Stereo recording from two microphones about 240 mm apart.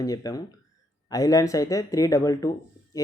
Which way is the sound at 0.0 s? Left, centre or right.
Centre.